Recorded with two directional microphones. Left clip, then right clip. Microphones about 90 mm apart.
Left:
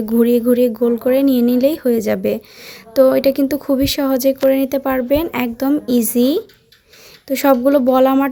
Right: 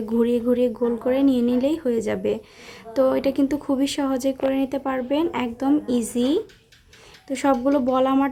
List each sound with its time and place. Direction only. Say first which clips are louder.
0.0 s speech: left 7 dB; 25° left (ahead or behind)